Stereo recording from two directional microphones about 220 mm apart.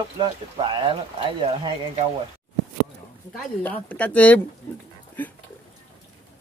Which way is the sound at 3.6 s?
5° left (ahead or behind).